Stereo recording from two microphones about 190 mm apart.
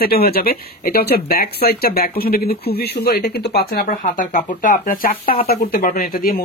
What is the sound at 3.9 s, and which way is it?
Speech, 40° left (ahead or behind).